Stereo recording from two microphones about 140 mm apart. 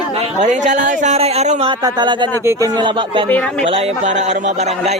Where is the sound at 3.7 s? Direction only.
45° right (ahead or behind).